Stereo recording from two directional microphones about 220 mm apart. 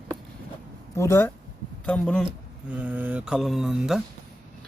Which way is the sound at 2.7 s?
5° right (ahead or behind).